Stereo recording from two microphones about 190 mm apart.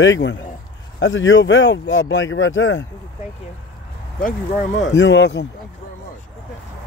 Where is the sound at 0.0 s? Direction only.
75° left (ahead or behind); by 2.8 s 90° left.